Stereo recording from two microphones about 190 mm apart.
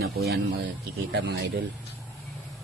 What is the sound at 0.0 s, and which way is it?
Speech, 60° right (ahead or behind).